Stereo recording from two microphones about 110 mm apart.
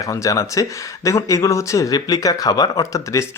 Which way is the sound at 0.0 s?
30° left (ahead or behind).